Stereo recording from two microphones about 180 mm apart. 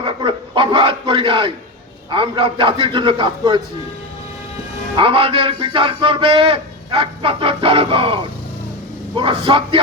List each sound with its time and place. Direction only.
0.0 s a man's voice: 25° right (ahead or behind)
4.9 s a man's voice: 30° right (ahead or behind)